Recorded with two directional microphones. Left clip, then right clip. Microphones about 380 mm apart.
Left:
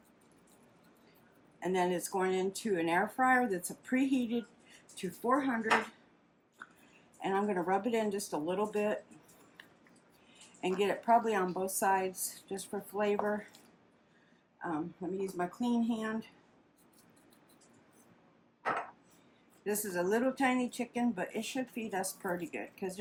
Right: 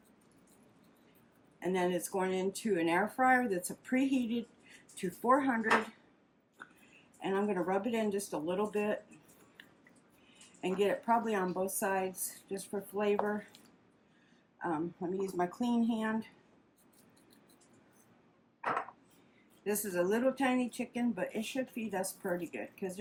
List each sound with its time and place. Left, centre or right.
1.5 s speech: centre
6.6 s a sound: centre
7.2 s speech: centre
10.6 s speech: centre
14.6 s speech: centre
19.6 s speech: centre